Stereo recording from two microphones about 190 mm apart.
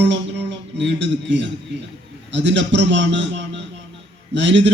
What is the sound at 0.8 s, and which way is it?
A man's voice, 70° right (ahead or behind).